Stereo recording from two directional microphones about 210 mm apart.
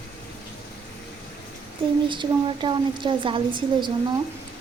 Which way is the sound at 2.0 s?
20° right (ahead or behind).